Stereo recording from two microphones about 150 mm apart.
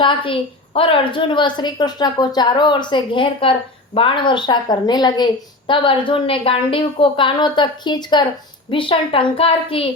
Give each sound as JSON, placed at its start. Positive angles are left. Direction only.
{"t": 0.0, "sound": "a woman's voice", "side_deg": 35}